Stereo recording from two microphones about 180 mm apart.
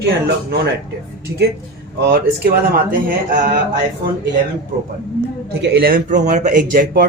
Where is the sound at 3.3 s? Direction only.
45° right (ahead or behind).